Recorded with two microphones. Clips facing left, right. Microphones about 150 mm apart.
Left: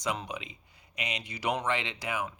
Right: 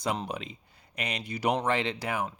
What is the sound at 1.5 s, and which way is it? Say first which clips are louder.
Speech: right 3 dB; 35° right (ahead or behind).